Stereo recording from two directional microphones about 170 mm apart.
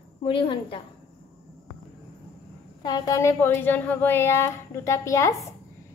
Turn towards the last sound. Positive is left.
turn(degrees=20)  # may be behind; listen again after turning